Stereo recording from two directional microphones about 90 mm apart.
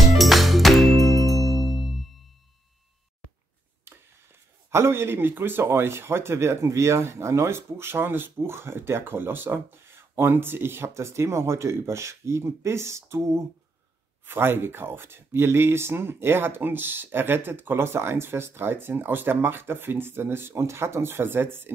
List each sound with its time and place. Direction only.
0.2 s music: centre (ahead or behind)
4.6 s speech: 30° right (ahead or behind)